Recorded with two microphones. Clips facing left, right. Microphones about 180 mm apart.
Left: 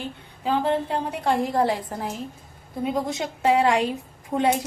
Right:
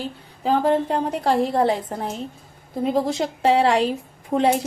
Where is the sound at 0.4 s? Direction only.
40° right (ahead or behind).